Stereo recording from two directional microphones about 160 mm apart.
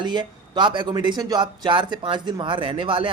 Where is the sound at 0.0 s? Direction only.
30° right (ahead or behind).